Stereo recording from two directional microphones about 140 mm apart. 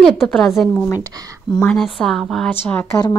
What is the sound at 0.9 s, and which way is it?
Speech, 25° right (ahead or behind).